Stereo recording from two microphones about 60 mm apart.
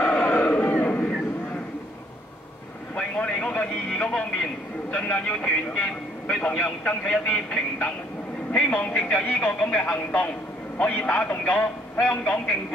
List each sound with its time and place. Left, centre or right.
0.0 s crowd: centre
3.0 s vehicle: centre
3.9 s a sound: centre
5.0 s a man's voice: centre